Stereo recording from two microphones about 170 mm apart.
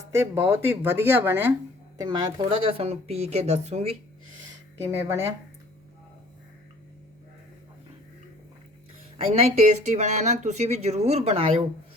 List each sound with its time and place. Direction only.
0.1 s speech: 15° right (ahead or behind)
2.0 s speech: 25° right (ahead or behind); by 3.9 s 40° right (ahead or behind)
4.9 s speech: 15° right (ahead or behind)
9.1 s speech: 35° right (ahead or behind)